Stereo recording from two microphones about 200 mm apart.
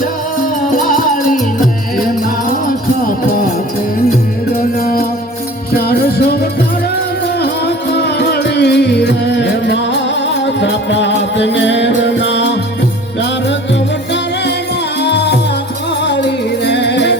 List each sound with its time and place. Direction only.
0.9 s music: 45° left (ahead or behind)
5.7 s music: 50° left (ahead or behind)
15.0 s music: 55° left (ahead or behind)